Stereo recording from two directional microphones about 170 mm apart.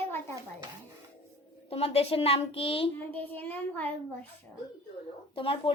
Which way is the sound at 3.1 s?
10° left (ahead or behind).